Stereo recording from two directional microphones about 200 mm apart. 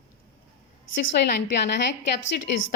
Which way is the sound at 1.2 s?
55° left (ahead or behind).